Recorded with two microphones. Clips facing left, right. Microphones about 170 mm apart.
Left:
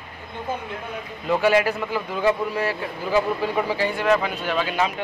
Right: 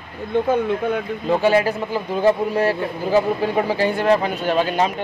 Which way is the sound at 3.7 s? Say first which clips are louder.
Right 3 dB; 35° right (ahead or behind).